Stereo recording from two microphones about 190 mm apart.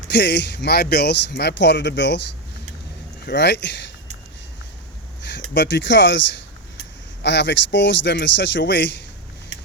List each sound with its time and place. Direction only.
0.1 s speech: 65° left (ahead or behind)
3.2 s speech: 60° left (ahead or behind)
5.2 s speech: 65° left (ahead or behind)